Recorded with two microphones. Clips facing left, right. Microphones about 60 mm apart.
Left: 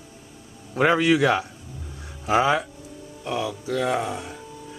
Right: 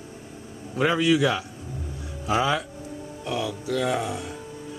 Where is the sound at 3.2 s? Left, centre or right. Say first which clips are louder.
Left 1 dB; centre.